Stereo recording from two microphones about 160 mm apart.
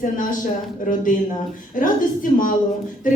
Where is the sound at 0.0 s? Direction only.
55° left (ahead or behind).